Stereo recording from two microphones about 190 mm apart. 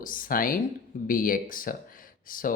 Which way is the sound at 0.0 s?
45° left (ahead or behind).